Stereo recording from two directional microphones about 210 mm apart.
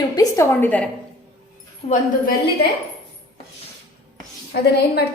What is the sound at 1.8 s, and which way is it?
Speech, 20° left (ahead or behind).